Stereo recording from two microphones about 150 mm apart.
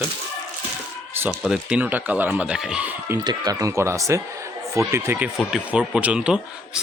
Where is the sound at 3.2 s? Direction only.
25° right (ahead or behind).